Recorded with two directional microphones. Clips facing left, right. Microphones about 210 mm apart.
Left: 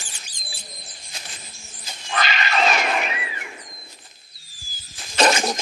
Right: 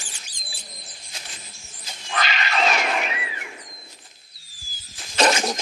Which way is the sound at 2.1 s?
50° left (ahead or behind).